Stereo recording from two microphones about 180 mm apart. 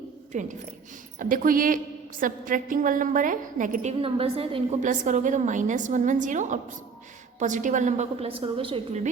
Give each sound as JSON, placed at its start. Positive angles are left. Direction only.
{"t": 0.3, "sound": "a woman's voice", "side_deg": -45}
{"t": 4.0, "sound": "a woman's voice", "side_deg": -30}